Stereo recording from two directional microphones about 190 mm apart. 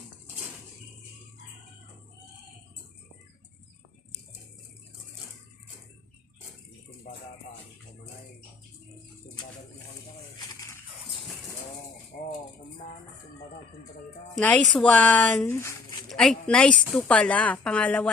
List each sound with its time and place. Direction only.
12.1 s rattle: 50° left (ahead or behind)
14.3 s speech: 5° left (ahead or behind)
16.0 s speech: centre (ahead or behind)